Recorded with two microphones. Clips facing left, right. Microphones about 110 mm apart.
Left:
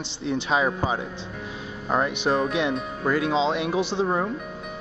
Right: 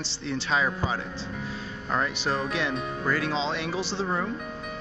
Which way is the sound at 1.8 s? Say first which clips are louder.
Left 4 dB; 15° left (ahead or behind).